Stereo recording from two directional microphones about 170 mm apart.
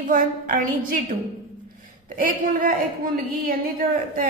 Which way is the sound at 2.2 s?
50° right (ahead or behind).